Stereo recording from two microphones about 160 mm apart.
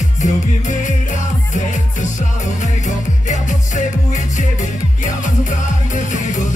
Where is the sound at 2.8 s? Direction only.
50° left (ahead or behind).